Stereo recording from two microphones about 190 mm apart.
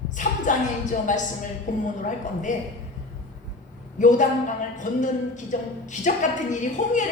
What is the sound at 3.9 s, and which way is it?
Speech, 40° left (ahead or behind).